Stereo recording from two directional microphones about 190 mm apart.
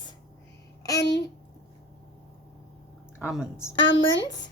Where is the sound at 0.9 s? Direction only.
60° left (ahead or behind).